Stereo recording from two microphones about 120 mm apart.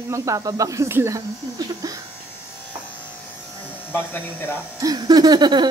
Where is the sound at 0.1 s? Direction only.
25° right (ahead or behind).